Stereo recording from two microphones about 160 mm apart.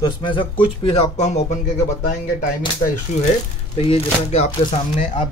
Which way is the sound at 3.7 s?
35° left (ahead or behind).